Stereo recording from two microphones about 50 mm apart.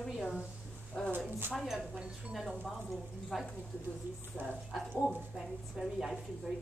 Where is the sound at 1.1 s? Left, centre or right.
Right.